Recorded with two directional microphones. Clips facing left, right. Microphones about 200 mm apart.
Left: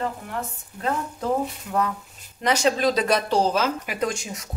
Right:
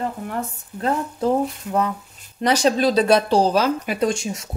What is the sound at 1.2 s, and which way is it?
Speech, 25° right (ahead or behind).